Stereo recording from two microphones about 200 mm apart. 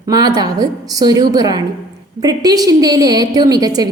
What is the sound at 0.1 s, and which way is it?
A woman's voice, 20° right (ahead or behind).